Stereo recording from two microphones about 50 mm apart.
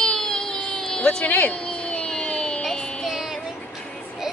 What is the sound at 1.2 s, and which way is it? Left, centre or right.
Speech, left.